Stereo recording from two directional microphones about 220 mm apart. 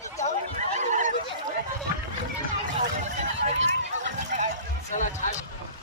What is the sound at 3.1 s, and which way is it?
Neigh, 30° right (ahead or behind).